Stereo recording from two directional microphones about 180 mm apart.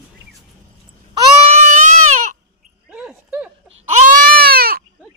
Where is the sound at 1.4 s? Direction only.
40° right (ahead or behind).